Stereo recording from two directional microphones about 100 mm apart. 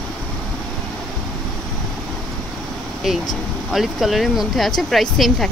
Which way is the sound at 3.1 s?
Centre (ahead or behind).